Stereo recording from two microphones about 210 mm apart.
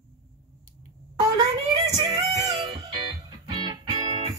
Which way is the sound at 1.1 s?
15° right (ahead or behind).